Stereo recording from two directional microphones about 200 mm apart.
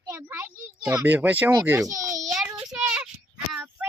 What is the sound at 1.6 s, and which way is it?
Speech, 15° right (ahead or behind).